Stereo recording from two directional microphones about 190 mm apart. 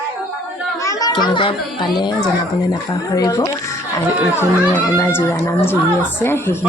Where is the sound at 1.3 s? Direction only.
25° left (ahead or behind).